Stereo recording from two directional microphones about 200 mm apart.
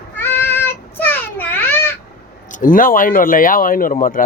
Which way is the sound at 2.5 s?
40° left (ahead or behind).